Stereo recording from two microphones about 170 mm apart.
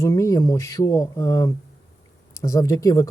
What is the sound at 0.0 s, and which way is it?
Speech, 20° left (ahead or behind).